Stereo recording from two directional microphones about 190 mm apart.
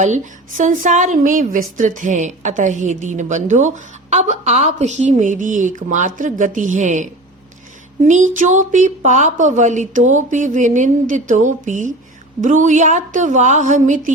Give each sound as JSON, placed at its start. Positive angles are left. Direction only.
{"t": 0.0, "sound": "a woman's voice", "side_deg": -40}